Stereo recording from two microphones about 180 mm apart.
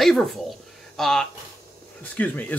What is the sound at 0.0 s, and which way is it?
Speech, centre (ahead or behind).